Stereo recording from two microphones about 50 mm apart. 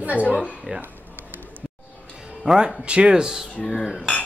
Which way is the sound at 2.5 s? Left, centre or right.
Right.